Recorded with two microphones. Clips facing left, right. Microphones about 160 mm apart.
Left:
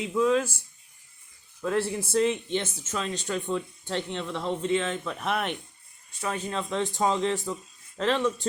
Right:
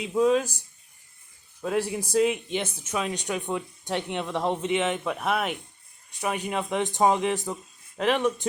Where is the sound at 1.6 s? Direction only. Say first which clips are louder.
Even; 15° right (ahead or behind).